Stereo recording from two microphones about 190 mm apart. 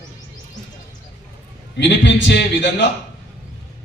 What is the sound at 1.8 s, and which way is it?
Speech, 65° left (ahead or behind).